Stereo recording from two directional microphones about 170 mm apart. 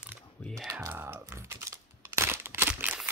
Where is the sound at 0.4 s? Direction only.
Centre (ahead or behind).